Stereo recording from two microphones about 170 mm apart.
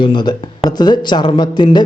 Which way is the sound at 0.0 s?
25° left (ahead or behind).